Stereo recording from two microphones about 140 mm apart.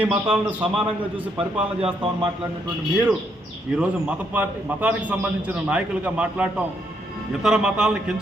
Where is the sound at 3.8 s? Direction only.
10° right (ahead or behind).